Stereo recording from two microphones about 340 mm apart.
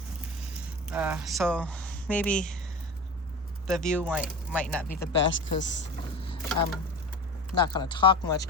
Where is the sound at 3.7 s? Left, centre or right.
Centre.